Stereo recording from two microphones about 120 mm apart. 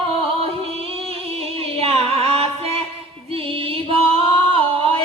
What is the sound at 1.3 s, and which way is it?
Music, 55° right (ahead or behind).